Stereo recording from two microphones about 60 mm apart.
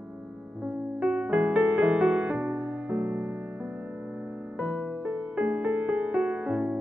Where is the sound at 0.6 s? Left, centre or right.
Right.